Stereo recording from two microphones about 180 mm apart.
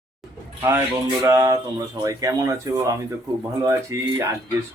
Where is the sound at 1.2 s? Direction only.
20° right (ahead or behind).